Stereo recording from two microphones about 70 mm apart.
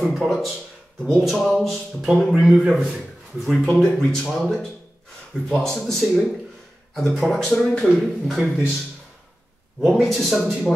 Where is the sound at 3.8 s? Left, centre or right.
Centre.